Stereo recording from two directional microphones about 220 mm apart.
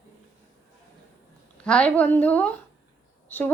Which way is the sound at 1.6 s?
5° left (ahead or behind).